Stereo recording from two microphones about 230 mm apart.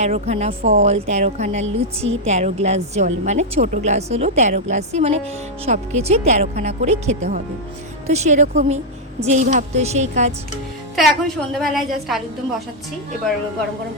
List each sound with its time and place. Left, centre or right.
0.0 s a woman's voice: right
10.9 s a woman's voice: centre